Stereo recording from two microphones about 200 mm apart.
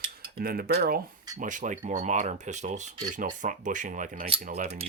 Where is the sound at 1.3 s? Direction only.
40° right (ahead or behind).